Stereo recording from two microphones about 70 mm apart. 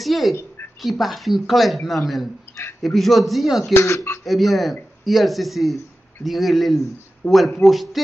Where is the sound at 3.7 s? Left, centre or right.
Left.